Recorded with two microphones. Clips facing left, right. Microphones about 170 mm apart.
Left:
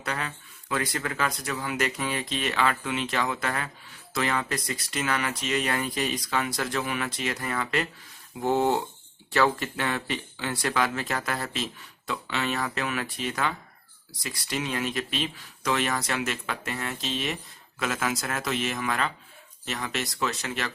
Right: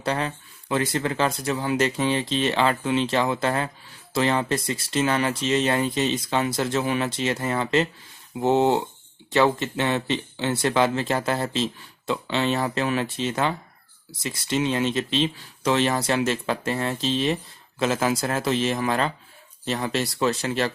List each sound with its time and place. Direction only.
0.0 s speech: 30° right (ahead or behind)